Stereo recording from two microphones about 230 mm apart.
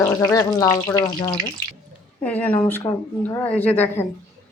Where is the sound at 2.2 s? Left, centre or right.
Centre.